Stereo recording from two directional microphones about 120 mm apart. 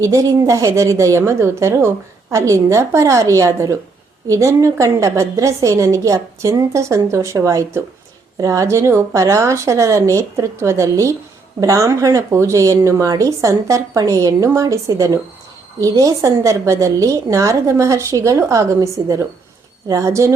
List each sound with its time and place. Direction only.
0.0 s speech: 25° right (ahead or behind)